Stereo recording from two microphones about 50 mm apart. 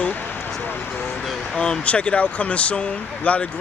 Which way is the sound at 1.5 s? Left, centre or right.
Centre.